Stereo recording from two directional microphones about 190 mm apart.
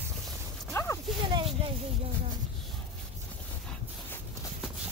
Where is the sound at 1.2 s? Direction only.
25° right (ahead or behind).